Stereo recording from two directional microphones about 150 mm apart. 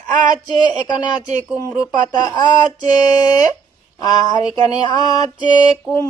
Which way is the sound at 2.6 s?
25° left (ahead or behind).